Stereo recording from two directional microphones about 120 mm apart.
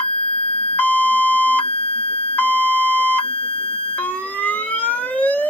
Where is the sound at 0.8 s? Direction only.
15° left (ahead or behind).